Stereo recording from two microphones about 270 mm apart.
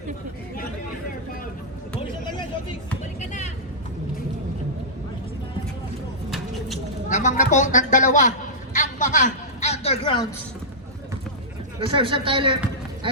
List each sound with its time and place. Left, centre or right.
3.2 s vehicle: left
7.1 s speech: left
8.7 s a sound: left
11.8 s speech: centre